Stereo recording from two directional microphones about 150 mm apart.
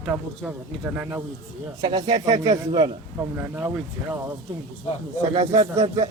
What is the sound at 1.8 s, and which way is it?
Speech, 25° right (ahead or behind).